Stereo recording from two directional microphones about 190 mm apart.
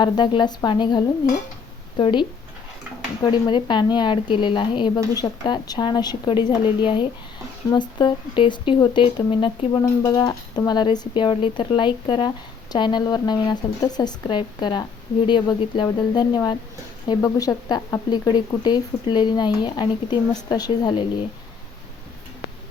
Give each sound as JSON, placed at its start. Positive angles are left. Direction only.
{"t": 0.0, "sound": "speech", "side_deg": 25}
{"t": 3.2, "sound": "speech", "side_deg": 25}